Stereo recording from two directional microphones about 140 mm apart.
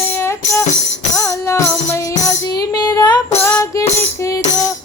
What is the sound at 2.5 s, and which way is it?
Female singing, 30° left (ahead or behind).